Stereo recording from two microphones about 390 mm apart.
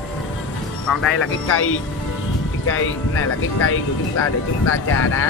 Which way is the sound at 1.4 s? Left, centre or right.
Left.